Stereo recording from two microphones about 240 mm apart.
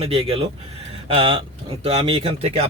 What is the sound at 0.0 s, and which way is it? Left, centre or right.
Speech, right.